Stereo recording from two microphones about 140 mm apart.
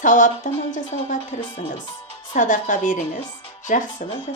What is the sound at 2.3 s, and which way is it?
A woman's voice, 65° left (ahead or behind).